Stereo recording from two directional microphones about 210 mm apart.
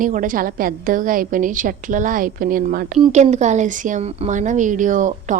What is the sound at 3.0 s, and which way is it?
A woman's voice, 30° right (ahead or behind).